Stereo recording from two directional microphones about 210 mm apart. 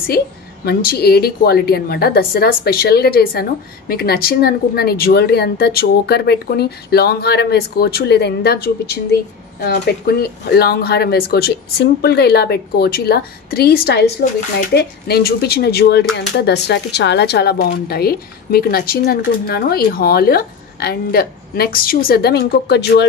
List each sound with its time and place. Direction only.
0.7 s speech: 50° left (ahead or behind)